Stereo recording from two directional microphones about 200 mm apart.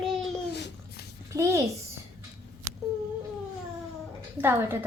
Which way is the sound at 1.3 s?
15° right (ahead or behind).